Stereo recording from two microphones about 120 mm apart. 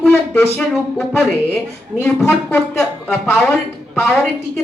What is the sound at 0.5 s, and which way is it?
Music, centre (ahead or behind).